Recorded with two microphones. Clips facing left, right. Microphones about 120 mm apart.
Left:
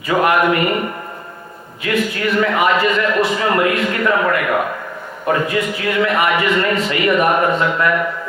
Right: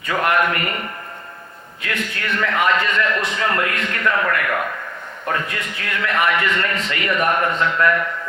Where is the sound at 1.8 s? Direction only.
5° left (ahead or behind).